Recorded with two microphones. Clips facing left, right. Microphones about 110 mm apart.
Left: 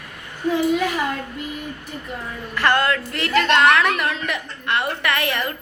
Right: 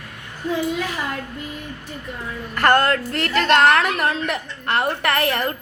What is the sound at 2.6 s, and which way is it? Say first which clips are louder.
A woman's voice: right 2 dB; 50° right (ahead or behind).